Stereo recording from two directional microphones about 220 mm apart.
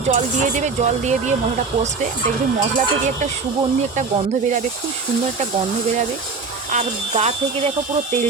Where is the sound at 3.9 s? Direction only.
35° right (ahead or behind).